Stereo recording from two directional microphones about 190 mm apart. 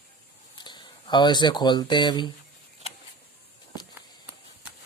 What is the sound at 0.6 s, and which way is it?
Speech, 25° left (ahead or behind).